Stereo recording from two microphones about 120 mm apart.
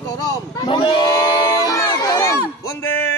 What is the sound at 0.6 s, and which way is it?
Crowd, 45° left (ahead or behind).